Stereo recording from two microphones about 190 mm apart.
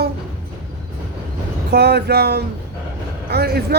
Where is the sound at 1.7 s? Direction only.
60° right (ahead or behind).